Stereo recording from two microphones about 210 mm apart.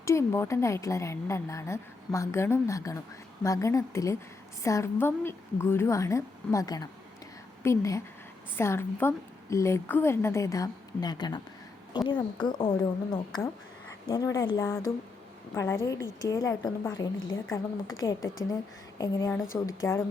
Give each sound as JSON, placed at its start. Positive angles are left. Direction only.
{"t": 0.0, "sound": "a woman's voice", "side_deg": 15}